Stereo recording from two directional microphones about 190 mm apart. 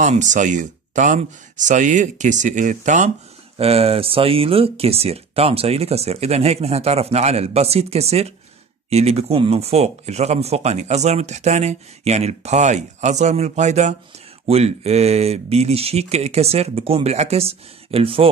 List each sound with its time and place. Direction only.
0.0 s speech: 40° right (ahead or behind)